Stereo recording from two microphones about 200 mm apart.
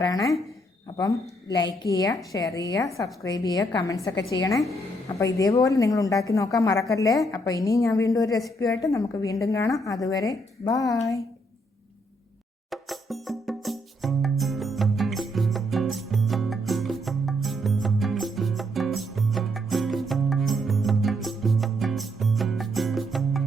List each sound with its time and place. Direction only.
0.0 s a woman's voice: 15° left (ahead or behind)
12.7 s music: centre (ahead or behind)